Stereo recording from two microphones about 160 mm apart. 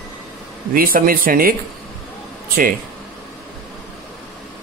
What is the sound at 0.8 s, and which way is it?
Speech, 65° right (ahead or behind).